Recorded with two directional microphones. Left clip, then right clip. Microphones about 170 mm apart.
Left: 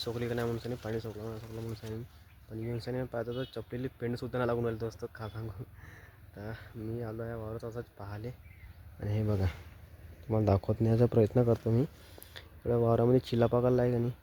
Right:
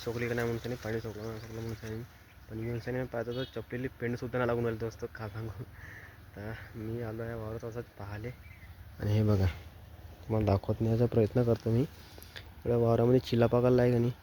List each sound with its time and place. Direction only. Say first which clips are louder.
0.2 s speech: right 4 dB; 10° left (ahead or behind)
9.0 s speech: right 4 dB; 20° right (ahead or behind)
10.2 s speech: left 1 dB; 10° left (ahead or behind); by 14.1 s 10° right (ahead or behind)